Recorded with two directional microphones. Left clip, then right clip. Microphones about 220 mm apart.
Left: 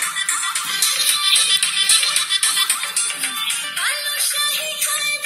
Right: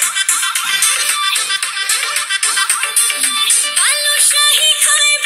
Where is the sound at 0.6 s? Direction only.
45° right (ahead or behind).